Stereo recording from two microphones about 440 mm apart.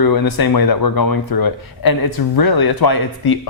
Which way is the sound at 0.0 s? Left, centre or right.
Left.